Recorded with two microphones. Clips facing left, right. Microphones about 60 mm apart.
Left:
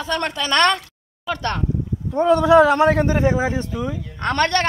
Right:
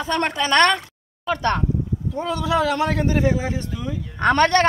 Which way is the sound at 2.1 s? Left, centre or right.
Left.